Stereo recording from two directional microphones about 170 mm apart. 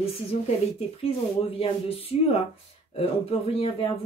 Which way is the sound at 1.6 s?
35° left (ahead or behind).